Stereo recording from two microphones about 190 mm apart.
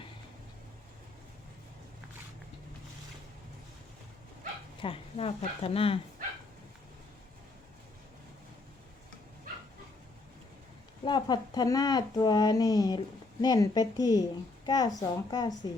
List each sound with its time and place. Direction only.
4.8 s speech: 30° left (ahead or behind)
11.0 s speech: 25° left (ahead or behind)